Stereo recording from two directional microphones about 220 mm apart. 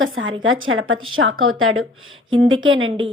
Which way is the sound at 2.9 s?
20° right (ahead or behind).